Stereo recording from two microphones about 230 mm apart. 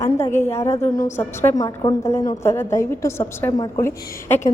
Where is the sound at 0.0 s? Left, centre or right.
Centre.